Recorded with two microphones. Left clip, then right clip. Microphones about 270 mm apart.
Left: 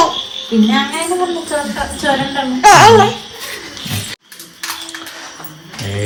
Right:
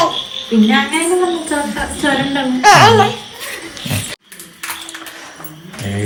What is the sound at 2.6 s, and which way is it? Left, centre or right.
Speech, left.